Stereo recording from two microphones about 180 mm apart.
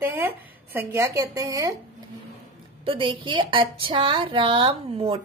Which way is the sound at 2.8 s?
30° right (ahead or behind).